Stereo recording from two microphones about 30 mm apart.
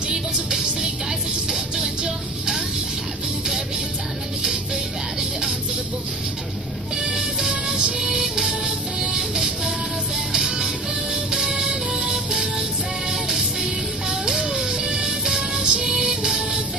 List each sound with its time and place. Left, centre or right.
0.1 s music: right
1.8 s music: right
7.0 s music: right
8.0 s music: centre
8.6 s music: right
14.7 s music: right